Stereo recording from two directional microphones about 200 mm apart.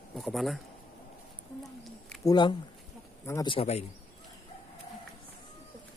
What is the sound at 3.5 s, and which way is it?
Speech, 30° left (ahead or behind).